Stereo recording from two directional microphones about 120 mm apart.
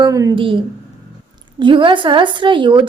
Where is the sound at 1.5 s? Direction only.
45° right (ahead or behind).